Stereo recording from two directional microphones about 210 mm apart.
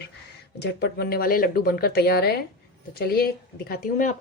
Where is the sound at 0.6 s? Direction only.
50° left (ahead or behind).